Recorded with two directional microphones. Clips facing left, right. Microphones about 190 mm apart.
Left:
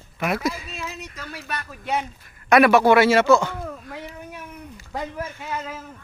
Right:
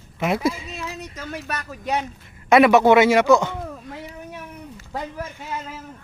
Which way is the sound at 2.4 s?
20° right (ahead or behind).